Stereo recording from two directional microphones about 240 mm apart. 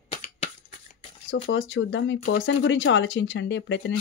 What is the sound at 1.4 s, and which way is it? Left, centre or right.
Speech, left.